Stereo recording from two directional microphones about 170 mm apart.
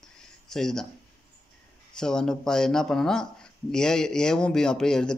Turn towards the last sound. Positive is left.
turn(degrees=5)  # may be behind; listen again after turning